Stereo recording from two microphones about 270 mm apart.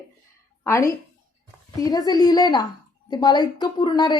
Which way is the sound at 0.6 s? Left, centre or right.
Centre.